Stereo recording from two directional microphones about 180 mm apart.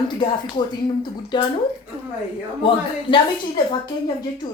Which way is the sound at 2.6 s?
30° left (ahead or behind).